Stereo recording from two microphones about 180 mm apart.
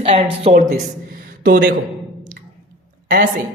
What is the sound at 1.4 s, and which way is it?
Speech, 55° right (ahead or behind).